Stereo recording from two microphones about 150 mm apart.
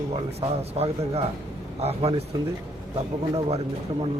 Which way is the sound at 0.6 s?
45° right (ahead or behind).